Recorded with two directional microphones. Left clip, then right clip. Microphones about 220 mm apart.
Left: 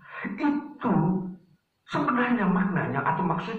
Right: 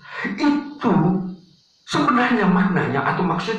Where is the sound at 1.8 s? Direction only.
45° right (ahead or behind).